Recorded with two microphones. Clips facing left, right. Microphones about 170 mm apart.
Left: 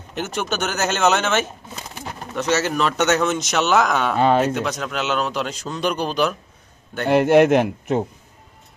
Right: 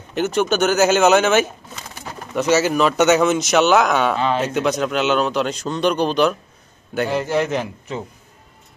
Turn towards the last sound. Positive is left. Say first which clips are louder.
# left 7 dB
turn(degrees=60)  # may be behind; listen again after turning